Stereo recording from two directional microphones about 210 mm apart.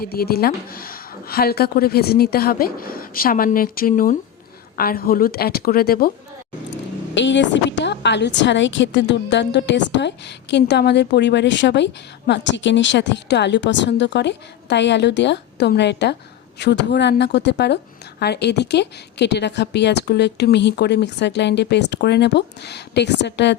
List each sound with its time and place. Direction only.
0.0 s a woman's voice: 45° left (ahead or behind)
7.2 s a woman's voice: 60° left (ahead or behind)